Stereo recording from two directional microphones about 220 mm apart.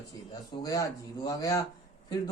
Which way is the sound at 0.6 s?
15° left (ahead or behind).